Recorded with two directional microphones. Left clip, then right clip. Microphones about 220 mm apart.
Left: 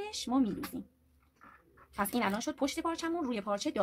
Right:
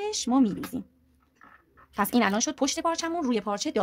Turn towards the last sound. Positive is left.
turn(degrees=-35)  # may be behind; listen again after turning